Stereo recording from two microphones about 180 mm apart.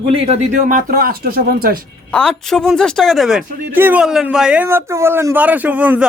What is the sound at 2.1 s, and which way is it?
Speech, 5° left (ahead or behind).